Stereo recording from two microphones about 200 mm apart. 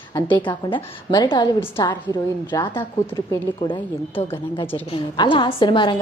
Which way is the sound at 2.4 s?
25° left (ahead or behind).